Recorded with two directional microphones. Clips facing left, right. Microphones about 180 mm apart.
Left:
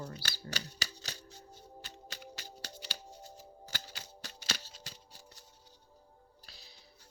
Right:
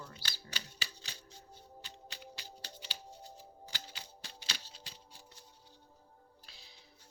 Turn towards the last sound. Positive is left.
turn(degrees=40)  # may be behind; listen again after turning